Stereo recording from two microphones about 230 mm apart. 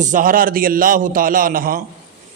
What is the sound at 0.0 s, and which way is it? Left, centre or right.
A man's voice, right.